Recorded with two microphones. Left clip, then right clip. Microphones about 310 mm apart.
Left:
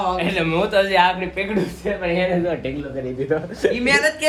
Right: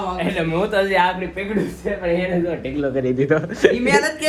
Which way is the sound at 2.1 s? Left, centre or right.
Centre.